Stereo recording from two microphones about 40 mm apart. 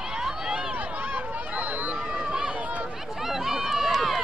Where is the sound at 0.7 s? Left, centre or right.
Right.